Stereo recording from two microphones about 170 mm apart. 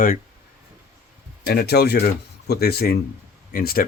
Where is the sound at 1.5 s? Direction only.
70° left (ahead or behind).